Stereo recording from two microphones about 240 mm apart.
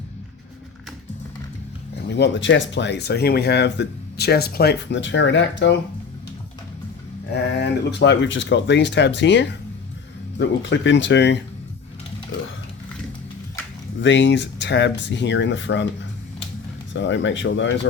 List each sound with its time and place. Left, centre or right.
2.0 s speech: left
7.3 s speech: left
14.0 s speech: left
16.9 s speech: left